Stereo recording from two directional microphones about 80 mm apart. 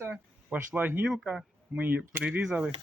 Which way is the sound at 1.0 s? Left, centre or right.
Centre.